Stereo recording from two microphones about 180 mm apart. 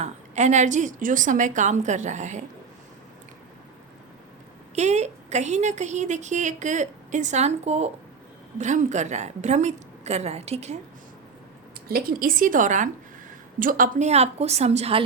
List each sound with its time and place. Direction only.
0.0 s a woman's voice: 40° right (ahead or behind)
4.7 s a woman's voice: 40° right (ahead or behind)
11.9 s a woman's voice: 55° right (ahead or behind); by 15.0 s 35° right (ahead or behind)